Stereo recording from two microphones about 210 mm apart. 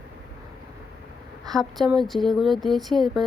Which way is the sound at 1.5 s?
Centre (ahead or behind).